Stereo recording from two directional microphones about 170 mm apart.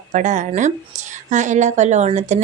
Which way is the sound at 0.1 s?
45° right (ahead or behind).